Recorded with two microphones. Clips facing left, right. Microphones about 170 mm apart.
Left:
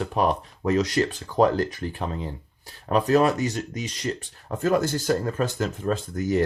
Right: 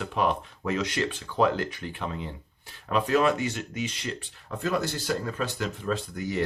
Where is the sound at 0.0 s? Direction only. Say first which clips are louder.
Left 3 dB; 40° left (ahead or behind).